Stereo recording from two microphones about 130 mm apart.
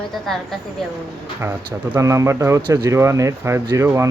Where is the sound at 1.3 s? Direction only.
20° right (ahead or behind).